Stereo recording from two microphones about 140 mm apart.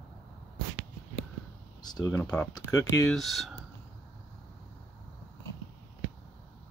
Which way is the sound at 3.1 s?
Centre (ahead or behind).